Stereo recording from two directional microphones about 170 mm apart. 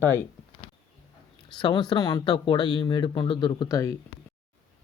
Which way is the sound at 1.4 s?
25° left (ahead or behind).